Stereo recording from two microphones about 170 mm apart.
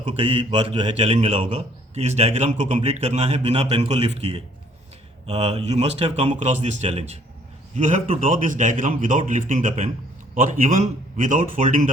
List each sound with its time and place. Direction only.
0.1 s a man's voice: 30° right (ahead or behind); by 11.9 s 50° right (ahead or behind)